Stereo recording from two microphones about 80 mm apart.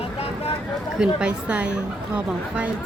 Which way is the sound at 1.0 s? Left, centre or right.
Centre.